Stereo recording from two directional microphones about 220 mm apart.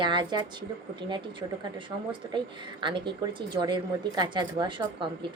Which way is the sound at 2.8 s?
20° right (ahead or behind).